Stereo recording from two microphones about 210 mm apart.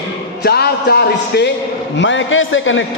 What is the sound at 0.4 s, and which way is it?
A man's voice, 50° left (ahead or behind).